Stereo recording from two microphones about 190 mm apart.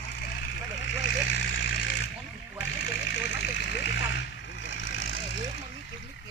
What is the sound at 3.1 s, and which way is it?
Vehicle, 65° left (ahead or behind).